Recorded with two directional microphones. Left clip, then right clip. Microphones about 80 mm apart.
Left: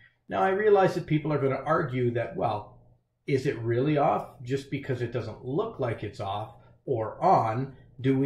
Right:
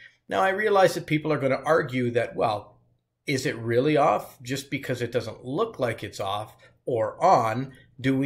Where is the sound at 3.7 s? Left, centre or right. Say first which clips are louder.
Right 5 dB; right.